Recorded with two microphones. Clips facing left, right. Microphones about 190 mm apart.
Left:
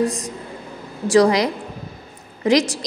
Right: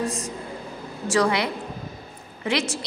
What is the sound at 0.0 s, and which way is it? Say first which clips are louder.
A woman's voice: left 6 dB; 35° left (ahead or behind).